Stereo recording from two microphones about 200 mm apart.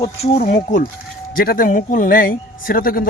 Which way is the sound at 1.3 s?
45° left (ahead or behind).